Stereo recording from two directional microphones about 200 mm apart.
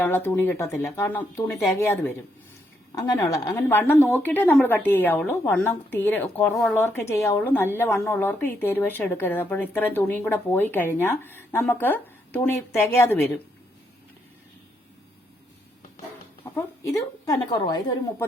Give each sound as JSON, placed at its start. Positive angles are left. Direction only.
{"t": 0.0, "sound": "speech", "side_deg": 10}
{"t": 16.4, "sound": "a woman's voice", "side_deg": 15}